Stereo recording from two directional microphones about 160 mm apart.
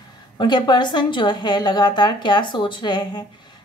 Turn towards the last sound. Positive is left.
turn(degrees=25)  # may be behind; listen again after turning